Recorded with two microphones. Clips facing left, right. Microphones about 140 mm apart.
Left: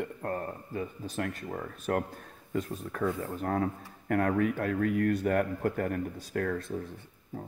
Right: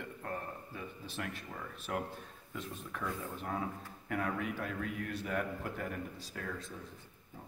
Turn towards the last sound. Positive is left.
turn(degrees=60)  # may be behind; listen again after turning